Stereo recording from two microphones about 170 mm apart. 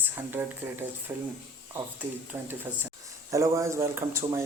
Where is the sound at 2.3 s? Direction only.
10° right (ahead or behind).